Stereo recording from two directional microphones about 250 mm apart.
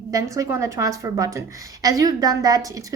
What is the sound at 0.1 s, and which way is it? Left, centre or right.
A woman's voice, centre.